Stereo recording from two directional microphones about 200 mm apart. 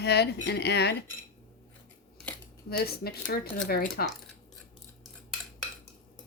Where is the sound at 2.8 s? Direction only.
50° left (ahead or behind).